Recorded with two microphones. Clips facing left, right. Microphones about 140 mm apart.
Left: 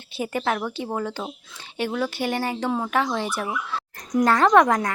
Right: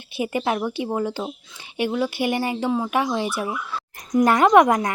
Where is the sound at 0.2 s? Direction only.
15° right (ahead or behind).